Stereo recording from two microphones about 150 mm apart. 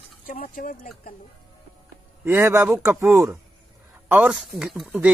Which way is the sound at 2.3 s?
15° right (ahead or behind).